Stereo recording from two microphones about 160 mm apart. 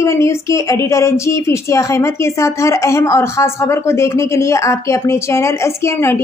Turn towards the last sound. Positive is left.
turn(degrees=15)  # may be behind; listen again after turning